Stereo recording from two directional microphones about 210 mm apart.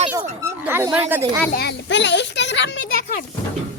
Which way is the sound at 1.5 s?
50° left (ahead or behind).